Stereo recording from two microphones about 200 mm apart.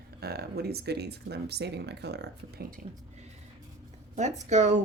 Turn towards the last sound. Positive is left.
turn(degrees=-35)  # may be behind; listen again after turning